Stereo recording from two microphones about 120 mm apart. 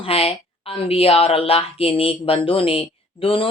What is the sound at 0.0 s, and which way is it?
A woman's voice, 55° left (ahead or behind).